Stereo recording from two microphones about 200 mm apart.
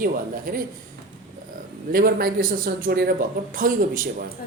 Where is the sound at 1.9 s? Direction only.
50° right (ahead or behind).